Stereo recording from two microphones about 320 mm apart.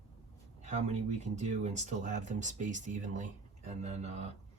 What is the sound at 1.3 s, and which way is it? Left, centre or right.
Speech, right.